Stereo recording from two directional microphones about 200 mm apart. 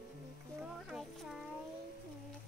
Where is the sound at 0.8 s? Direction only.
Centre (ahead or behind).